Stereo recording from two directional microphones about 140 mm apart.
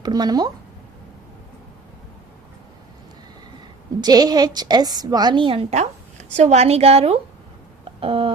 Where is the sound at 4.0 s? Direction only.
30° right (ahead or behind).